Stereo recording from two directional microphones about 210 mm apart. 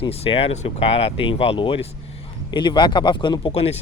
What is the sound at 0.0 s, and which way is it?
Speech, 25° left (ahead or behind).